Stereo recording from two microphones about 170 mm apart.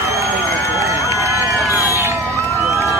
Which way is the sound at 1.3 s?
15° right (ahead or behind).